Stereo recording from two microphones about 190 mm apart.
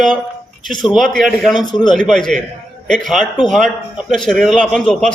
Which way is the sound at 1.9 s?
5° left (ahead or behind).